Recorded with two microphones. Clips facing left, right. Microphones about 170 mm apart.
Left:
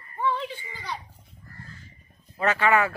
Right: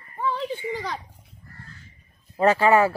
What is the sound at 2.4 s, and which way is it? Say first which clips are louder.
Speech: right 5 dB; 35° right (ahead or behind).